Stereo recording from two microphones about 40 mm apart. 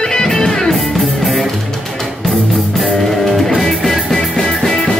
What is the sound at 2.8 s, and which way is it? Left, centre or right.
Music, centre.